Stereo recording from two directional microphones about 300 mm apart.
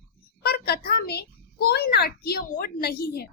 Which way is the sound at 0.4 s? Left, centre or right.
Left.